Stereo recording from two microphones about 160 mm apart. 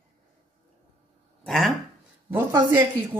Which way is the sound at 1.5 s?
5° left (ahead or behind).